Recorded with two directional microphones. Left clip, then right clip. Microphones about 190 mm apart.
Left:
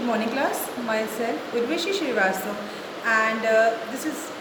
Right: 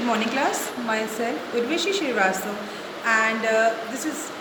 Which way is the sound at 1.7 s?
20° left (ahead or behind).